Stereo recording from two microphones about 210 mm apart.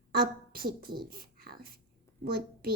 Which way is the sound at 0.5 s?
45° right (ahead or behind).